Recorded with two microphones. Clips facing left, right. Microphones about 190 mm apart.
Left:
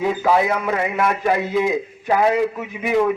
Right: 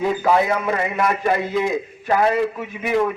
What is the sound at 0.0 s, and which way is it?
A man's voice, 5° left (ahead or behind).